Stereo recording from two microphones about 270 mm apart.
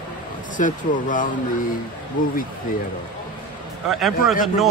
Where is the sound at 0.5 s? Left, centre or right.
Left.